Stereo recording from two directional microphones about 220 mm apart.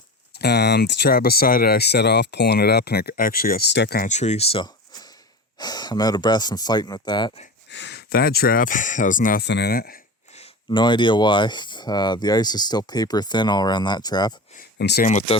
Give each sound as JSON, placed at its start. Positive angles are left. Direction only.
{"t": 0.3, "sound": "speech", "side_deg": 50}
{"t": 7.7, "sound": "speech", "side_deg": 50}
{"t": 10.3, "sound": "speech", "side_deg": 25}
{"t": 14.5, "sound": "speech", "side_deg": 45}